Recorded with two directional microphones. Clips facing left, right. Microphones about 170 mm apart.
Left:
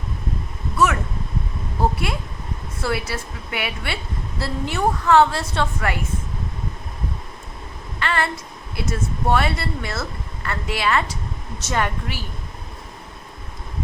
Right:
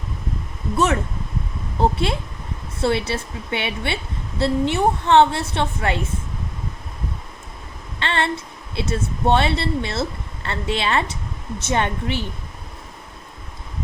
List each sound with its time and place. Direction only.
1.8 s a woman's voice: 25° right (ahead or behind)
7.9 s a sound: 25° right (ahead or behind)
8.7 s a woman's voice: 25° right (ahead or behind)